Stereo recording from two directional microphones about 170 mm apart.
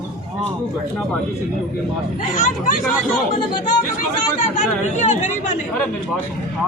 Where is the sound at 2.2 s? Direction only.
50° left (ahead or behind).